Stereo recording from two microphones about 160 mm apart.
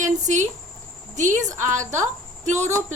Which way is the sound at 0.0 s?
50° right (ahead or behind).